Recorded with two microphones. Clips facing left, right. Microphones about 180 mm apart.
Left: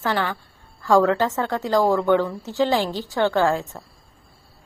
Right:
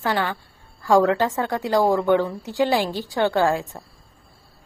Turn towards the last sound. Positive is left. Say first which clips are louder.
# even
turn(degrees=-15)  # may be behind; listen again after turning